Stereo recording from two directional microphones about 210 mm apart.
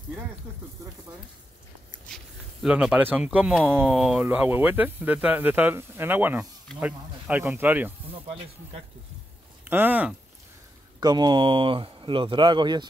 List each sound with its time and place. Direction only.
2.6 s speech: 5° right (ahead or behind)
9.7 s speech: 10° right (ahead or behind)
11.0 s speech: 20° right (ahead or behind)